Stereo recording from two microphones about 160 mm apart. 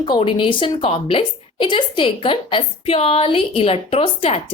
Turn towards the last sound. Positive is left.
turn(degrees=35)  # may be behind; listen again after turning